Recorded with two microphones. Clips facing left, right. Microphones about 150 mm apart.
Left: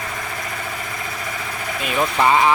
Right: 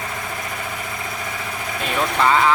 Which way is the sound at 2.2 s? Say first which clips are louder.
Left 1 dB; 15° left (ahead or behind).